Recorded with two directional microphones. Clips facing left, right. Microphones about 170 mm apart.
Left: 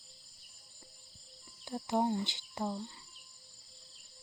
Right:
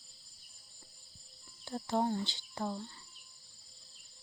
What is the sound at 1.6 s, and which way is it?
Speech, 15° left (ahead or behind).